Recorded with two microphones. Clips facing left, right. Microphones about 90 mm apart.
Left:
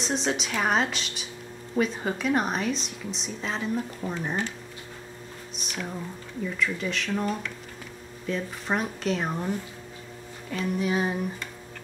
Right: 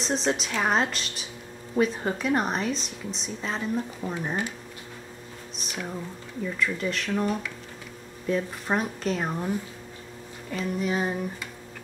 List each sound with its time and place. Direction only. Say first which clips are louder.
0.0 s a woman's voice: right 1 dB; centre (ahead or behind)
5.7 s a woman's voice: even; centre (ahead or behind)
10.5 s a woman's voice: left 1 dB; centre (ahead or behind)